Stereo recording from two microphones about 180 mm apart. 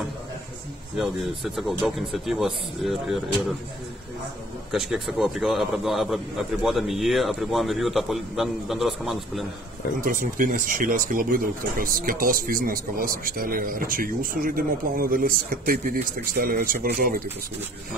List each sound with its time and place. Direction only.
0.9 s a man's voice: centre (ahead or behind)
4.6 s a man's voice: centre (ahead or behind)
9.9 s speech: 50° right (ahead or behind)